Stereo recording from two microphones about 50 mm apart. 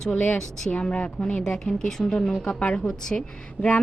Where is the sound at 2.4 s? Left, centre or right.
Left.